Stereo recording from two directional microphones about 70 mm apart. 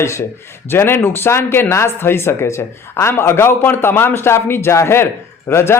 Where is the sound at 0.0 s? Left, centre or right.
Left.